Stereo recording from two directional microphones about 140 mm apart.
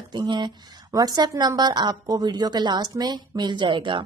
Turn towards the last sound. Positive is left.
turn(degrees=-35)  # may be behind; listen again after turning